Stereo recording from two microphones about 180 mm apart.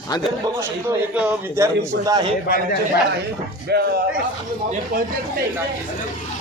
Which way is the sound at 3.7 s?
65° right (ahead or behind).